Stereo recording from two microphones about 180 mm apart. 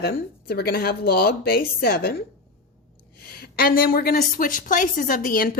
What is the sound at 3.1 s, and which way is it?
A woman's voice, 60° left (ahead or behind).